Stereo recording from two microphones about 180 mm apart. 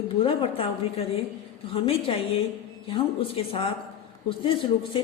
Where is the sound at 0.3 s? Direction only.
30° left (ahead or behind).